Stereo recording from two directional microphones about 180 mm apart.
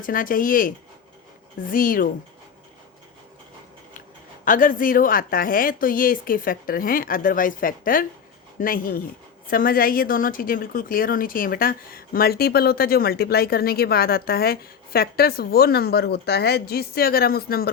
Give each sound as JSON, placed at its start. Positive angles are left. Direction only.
{"t": 0.0, "sound": "a woman's voice", "side_deg": 50}
{"t": 4.4, "sound": "a woman's voice", "side_deg": 50}